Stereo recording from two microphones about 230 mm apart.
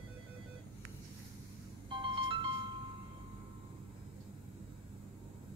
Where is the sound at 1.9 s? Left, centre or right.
Right.